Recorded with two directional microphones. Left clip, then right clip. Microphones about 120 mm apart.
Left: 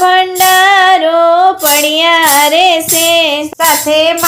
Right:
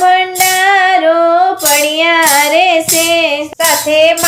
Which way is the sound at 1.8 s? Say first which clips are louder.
Left 2 dB; 35° left (ahead or behind).